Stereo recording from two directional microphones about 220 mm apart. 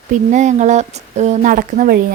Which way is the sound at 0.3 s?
35° right (ahead or behind).